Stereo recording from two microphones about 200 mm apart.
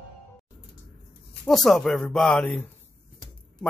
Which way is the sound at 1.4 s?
Centre (ahead or behind).